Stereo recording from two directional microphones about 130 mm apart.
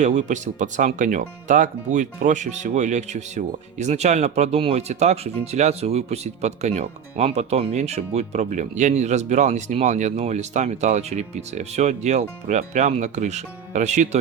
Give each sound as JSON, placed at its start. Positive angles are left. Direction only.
{"t": 0.0, "sound": "speech", "side_deg": -65}